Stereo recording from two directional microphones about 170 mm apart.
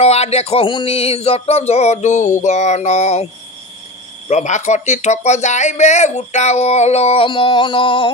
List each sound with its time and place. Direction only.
0.0 s speech: 35° left (ahead or behind)
2.4 s a sound: 40° left (ahead or behind)
4.3 s speech: 45° left (ahead or behind)